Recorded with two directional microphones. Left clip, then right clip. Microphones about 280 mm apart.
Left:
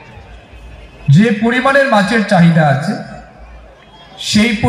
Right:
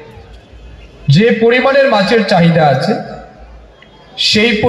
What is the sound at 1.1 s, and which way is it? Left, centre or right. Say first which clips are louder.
A man's voice: right 4 dB; right.